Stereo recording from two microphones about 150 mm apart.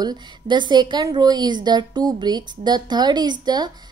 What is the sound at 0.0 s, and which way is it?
A woman's voice, 30° right (ahead or behind).